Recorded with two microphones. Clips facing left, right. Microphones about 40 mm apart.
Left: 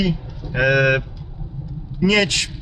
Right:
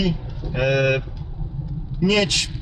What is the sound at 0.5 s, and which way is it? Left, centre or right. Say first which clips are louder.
Speech: left 3 dB; left.